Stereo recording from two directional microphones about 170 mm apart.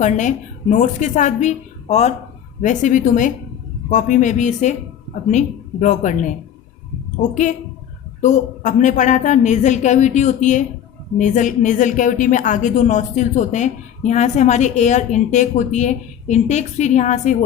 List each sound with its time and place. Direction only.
0.0 s a woman's voice: 45° left (ahead or behind)